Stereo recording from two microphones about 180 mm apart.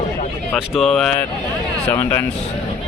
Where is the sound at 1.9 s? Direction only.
15° left (ahead or behind).